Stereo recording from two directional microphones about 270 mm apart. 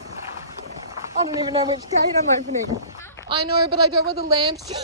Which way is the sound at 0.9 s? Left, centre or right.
Centre.